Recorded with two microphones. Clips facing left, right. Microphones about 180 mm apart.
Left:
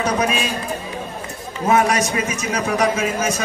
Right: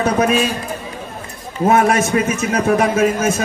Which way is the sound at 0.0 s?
50° right (ahead or behind).